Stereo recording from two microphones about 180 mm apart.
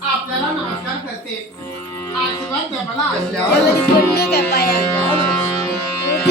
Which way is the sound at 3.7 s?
65° left (ahead or behind).